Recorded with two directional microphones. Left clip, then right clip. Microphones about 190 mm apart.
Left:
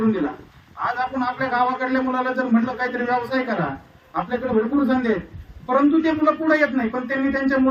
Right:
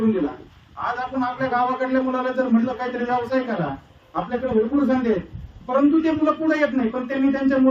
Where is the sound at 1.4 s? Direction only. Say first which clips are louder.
Left 1 dB; centre (ahead or behind).